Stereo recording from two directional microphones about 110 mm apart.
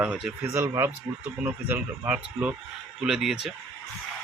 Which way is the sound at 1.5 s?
15° right (ahead or behind).